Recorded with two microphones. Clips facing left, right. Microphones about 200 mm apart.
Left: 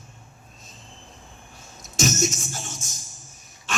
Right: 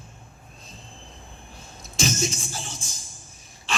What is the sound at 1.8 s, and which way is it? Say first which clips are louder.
Speech: left 3 dB; 45° left (ahead or behind).